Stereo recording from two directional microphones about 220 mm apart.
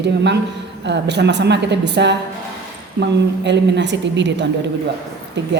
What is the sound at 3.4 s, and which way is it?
A woman's voice, 55° right (ahead or behind).